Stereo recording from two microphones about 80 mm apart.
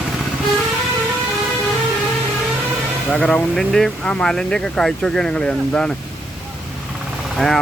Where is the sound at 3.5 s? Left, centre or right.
Centre.